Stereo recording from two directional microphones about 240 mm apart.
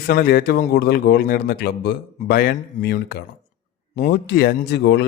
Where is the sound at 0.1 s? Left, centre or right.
Left.